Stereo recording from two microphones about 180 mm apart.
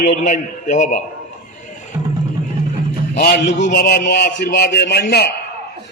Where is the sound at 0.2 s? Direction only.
45° left (ahead or behind).